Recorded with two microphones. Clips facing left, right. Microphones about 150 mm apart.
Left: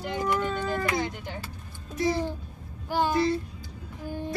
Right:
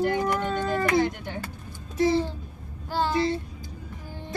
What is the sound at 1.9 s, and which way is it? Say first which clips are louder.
Babbling: right 4 dB; 30° right (ahead or behind).